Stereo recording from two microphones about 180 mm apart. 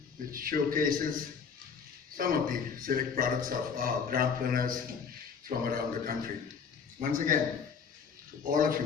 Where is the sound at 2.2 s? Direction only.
50° right (ahead or behind).